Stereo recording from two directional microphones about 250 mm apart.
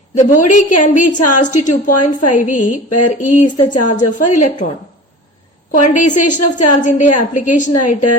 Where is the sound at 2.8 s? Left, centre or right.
Left.